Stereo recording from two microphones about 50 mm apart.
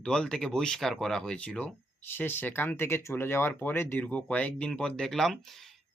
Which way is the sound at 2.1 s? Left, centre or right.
Left.